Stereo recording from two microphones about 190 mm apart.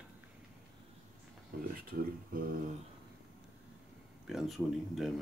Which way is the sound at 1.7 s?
50° right (ahead or behind).